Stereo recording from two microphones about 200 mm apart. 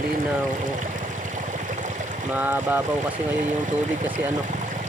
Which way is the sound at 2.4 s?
10° right (ahead or behind).